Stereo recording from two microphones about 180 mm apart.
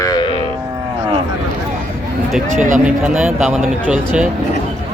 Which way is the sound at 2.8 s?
10° right (ahead or behind).